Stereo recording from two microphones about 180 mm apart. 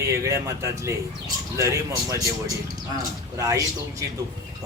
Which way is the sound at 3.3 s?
15° right (ahead or behind).